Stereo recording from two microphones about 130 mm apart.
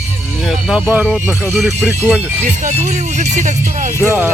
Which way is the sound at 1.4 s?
Centre (ahead or behind).